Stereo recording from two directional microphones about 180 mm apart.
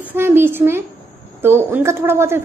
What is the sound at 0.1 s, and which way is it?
A woman's voice, 10° right (ahead or behind).